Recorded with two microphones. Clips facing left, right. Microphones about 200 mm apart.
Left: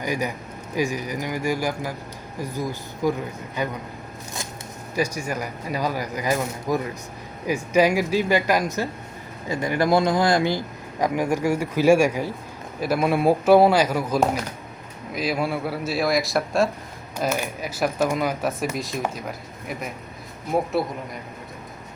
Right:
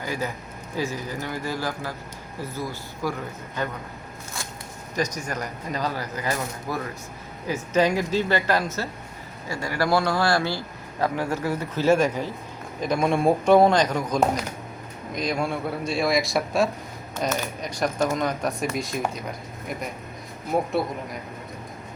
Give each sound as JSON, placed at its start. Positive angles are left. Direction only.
{"t": 0.0, "sound": "speech", "side_deg": 15}
{"t": 4.9, "sound": "speech", "side_deg": 10}
{"t": 17.2, "sound": "speech", "side_deg": 10}
{"t": 20.5, "sound": "speech", "side_deg": 0}